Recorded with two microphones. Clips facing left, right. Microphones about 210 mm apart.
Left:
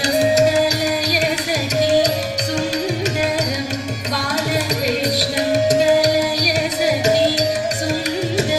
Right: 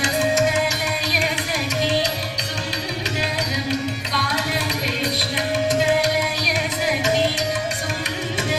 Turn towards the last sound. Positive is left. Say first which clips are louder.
# left 5 dB
turn(degrees=40)  # may be behind; listen again after turning